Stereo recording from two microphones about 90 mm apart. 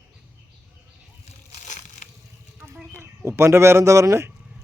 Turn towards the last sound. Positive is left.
turn(degrees=-35)  # may be behind; listen again after turning